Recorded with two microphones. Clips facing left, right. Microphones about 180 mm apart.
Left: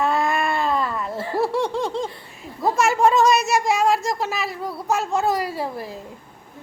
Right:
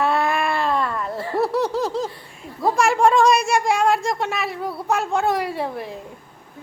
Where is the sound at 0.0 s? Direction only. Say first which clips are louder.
Right 1 dB; centre (ahead or behind).